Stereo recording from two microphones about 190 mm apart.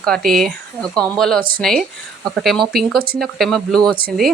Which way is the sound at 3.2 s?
Centre (ahead or behind).